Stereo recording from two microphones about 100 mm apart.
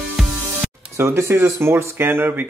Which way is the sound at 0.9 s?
25° right (ahead or behind).